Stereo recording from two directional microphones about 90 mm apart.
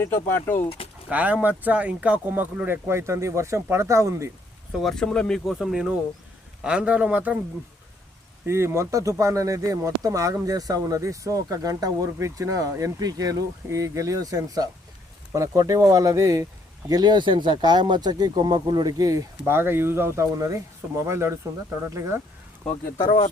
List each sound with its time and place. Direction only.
0.0 s speech: 30° left (ahead or behind)
1.1 s speech: 15° right (ahead or behind); by 4.3 s 35° right (ahead or behind)
4.8 s speech: 5° left (ahead or behind)
5.5 s speech: 5° right (ahead or behind)
8.4 s speech: 30° right (ahead or behind)
16.9 s speech: 55° right (ahead or behind); by 22.1 s 30° right (ahead or behind)
23.0 s speech: 85° left